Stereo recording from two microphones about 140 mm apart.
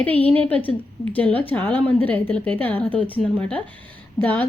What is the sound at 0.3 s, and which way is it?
A woman's voice, 10° left (ahead or behind).